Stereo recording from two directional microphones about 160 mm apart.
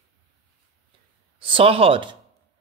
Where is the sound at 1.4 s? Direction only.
35° right (ahead or behind).